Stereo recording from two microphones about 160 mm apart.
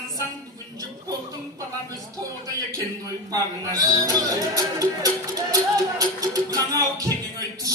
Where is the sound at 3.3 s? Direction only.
20° right (ahead or behind).